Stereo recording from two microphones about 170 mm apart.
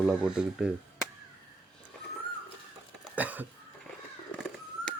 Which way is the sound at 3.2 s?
10° right (ahead or behind).